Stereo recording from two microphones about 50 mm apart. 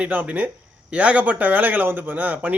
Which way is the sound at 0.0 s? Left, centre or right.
Right.